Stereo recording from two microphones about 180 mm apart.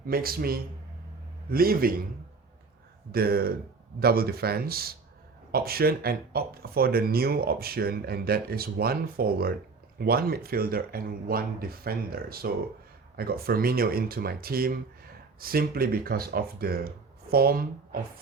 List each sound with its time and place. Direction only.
0.1 s speech: 55° right (ahead or behind)
3.1 s speech: 60° right (ahead or behind)